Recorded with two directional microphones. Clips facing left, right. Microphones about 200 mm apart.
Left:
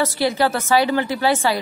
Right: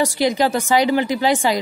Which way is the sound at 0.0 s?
15° right (ahead or behind).